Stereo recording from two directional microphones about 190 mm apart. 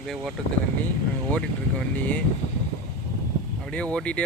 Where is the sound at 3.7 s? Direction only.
5° left (ahead or behind).